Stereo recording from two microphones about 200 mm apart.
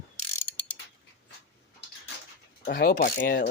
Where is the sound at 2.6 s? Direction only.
50° left (ahead or behind).